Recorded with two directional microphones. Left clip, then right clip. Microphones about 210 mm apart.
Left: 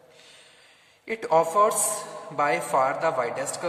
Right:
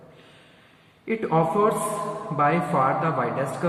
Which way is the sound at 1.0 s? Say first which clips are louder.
Left 1 dB; 65° left (ahead or behind).